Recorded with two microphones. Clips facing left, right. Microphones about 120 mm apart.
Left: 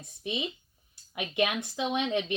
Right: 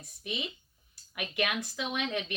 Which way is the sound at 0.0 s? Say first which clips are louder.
Left 4 dB; 20° left (ahead or behind).